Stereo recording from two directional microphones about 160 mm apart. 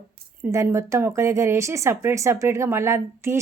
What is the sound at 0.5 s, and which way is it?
Speech, 20° right (ahead or behind).